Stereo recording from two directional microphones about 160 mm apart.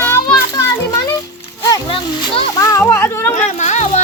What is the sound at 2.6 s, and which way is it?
Children playing, 20° left (ahead or behind).